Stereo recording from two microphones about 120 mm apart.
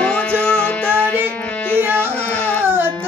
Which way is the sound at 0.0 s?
10° left (ahead or behind).